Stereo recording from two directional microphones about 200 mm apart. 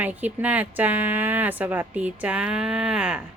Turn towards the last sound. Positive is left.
turn(degrees=-5)  # may be behind; listen again after turning